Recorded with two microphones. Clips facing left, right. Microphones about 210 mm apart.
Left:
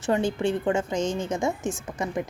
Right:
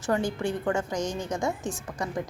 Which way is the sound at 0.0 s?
25° left (ahead or behind).